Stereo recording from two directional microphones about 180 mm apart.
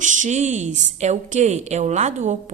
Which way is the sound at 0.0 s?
45° right (ahead or behind).